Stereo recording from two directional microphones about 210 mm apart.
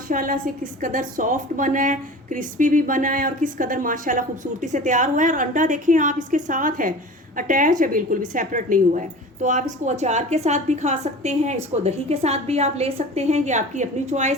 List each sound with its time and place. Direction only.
0.1 s a woman's voice: 40° right (ahead or behind)